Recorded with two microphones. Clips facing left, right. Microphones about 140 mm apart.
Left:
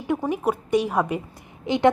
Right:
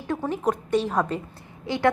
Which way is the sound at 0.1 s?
15° left (ahead or behind).